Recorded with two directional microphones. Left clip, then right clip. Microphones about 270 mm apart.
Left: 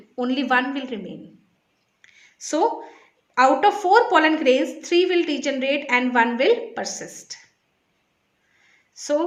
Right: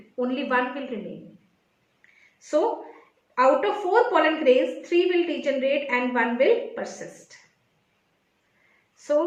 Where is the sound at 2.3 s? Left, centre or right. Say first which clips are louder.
Left 2 dB; left.